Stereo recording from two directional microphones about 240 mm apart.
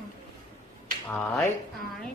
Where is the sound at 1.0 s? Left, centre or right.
Centre.